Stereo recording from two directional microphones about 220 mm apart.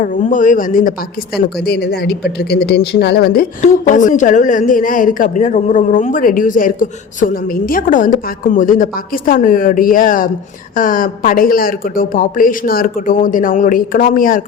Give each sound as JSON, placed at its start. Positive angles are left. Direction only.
{"t": 0.0, "sound": "speech", "side_deg": 35}